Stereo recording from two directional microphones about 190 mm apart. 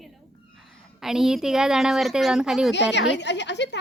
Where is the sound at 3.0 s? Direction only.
65° left (ahead or behind).